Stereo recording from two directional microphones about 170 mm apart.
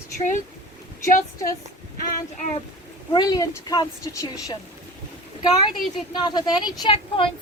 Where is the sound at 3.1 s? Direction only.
25° left (ahead or behind).